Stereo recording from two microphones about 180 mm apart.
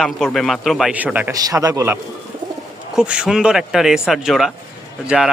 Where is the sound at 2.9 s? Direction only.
5° right (ahead or behind).